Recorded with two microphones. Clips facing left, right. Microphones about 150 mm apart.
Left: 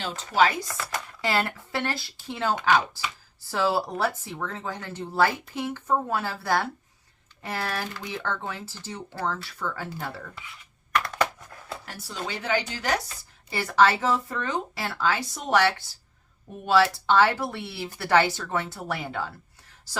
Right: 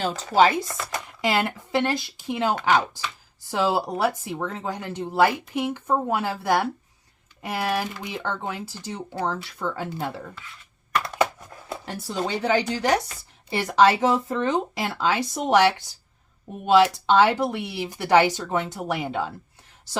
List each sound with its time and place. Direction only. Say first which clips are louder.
0.3 s speech: right 3 dB; 25° right (ahead or behind)
11.2 s a sound: right 3 dB; 20° right (ahead or behind)
12.1 s speech: right 5 dB; 30° right (ahead or behind)